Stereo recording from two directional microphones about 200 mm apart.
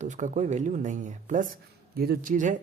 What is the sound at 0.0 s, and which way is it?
Speech, 40° right (ahead or behind).